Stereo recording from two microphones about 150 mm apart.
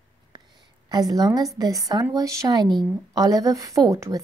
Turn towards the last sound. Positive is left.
turn(degrees=-20)  # may be behind; listen again after turning